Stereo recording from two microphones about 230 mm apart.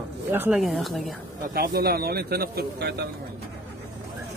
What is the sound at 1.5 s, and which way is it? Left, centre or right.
Speech, right.